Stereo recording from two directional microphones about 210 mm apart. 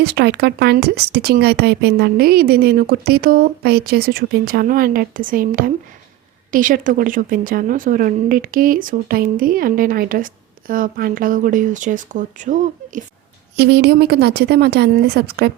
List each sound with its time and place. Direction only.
0.0 s a woman's voice: 50° right (ahead or behind)
13.6 s speech: 50° right (ahead or behind)